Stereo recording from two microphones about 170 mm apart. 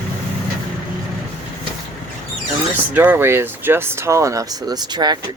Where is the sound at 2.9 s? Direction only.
10° right (ahead or behind).